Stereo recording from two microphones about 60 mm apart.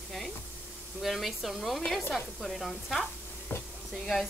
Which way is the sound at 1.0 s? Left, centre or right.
Centre.